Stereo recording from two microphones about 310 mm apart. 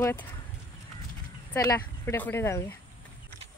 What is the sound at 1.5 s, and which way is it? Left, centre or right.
Speech, centre.